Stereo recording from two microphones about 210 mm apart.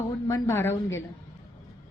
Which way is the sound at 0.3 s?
15° left (ahead or behind).